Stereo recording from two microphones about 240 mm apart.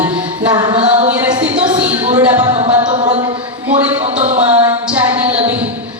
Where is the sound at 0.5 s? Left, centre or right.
Right.